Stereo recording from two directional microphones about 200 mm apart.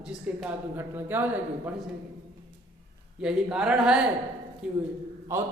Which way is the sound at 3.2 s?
5° right (ahead or behind).